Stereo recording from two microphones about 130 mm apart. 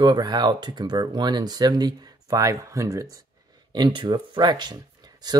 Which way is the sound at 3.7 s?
35° right (ahead or behind).